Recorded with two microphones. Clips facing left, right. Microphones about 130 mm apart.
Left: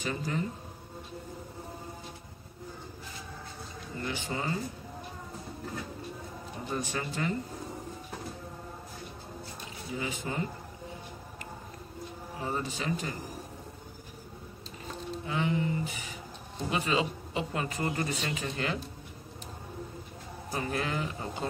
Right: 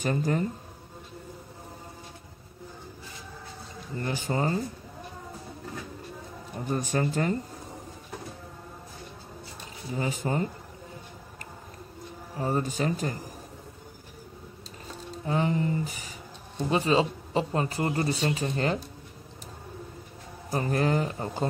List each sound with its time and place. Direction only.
0.0 s speech: 45° right (ahead or behind)
4.0 s a man's voice: 40° right (ahead or behind)
6.7 s speech: 45° right (ahead or behind)
9.9 s a man's voice: 40° right (ahead or behind)
12.4 s speech: 45° right (ahead or behind)
15.2 s a man's voice: 40° right (ahead or behind)
20.5 s a man's voice: 40° right (ahead or behind)